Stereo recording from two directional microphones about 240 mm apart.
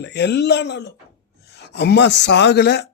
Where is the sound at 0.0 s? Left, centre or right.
Left.